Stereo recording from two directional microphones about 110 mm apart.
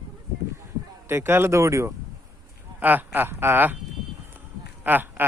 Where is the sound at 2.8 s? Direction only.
15° right (ahead or behind).